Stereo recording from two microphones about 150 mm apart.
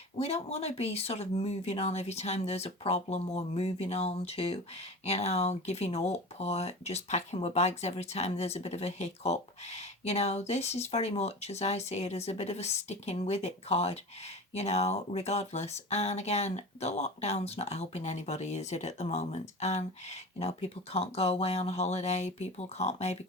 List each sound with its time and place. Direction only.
0.2 s speech: 45° left (ahead or behind)